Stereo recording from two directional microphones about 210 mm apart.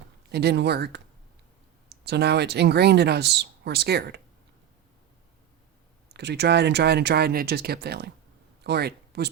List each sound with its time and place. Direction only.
0.3 s speech: 50° right (ahead or behind)
6.1 s speech: 55° right (ahead or behind)